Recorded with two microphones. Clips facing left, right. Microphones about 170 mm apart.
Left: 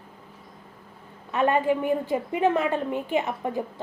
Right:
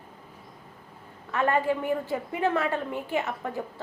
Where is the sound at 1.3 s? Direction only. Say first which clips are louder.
Left 3 dB; 20° left (ahead or behind).